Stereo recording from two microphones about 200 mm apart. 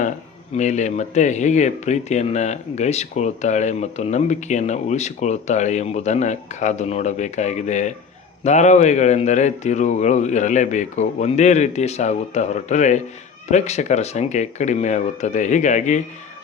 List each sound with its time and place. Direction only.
0.5 s speech: 35° left (ahead or behind)